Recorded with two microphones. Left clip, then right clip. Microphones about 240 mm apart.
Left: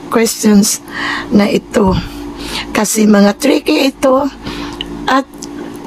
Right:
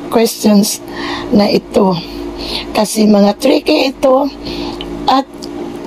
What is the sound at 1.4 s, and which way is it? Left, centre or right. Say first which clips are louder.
Speech: right 2 dB; centre.